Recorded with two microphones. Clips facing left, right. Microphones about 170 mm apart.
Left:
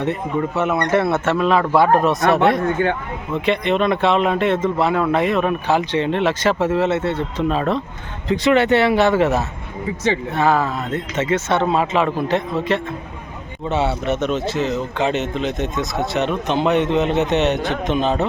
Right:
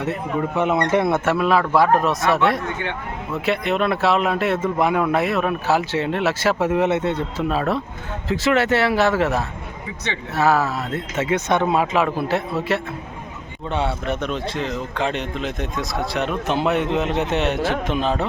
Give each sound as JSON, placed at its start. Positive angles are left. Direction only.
{"t": 0.5, "sound": "speech", "side_deg": -15}
{"t": 2.8, "sound": "speech", "side_deg": 45}
{"t": 3.3, "sound": "speech", "side_deg": -5}